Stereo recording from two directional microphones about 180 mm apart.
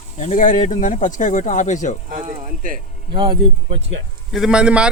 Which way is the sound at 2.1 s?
45° right (ahead or behind).